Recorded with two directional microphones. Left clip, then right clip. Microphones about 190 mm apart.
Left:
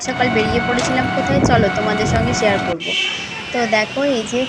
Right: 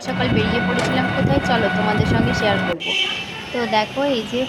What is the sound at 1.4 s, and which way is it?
A woman's voice, centre (ahead or behind).